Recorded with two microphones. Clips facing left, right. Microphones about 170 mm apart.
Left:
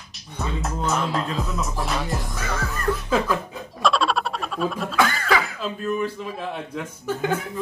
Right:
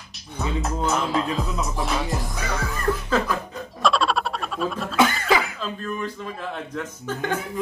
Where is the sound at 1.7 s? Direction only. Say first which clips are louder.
Right 1 dB; centre (ahead or behind).